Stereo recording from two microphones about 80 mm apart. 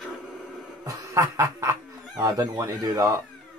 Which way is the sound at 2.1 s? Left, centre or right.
Right.